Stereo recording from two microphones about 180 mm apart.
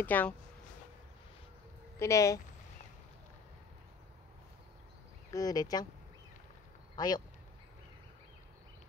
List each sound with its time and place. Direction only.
0.0 s speech: 10° left (ahead or behind)
2.0 s speech: 15° left (ahead or behind)
5.3 s speech: 20° left (ahead or behind)
7.0 s speech: 20° left (ahead or behind)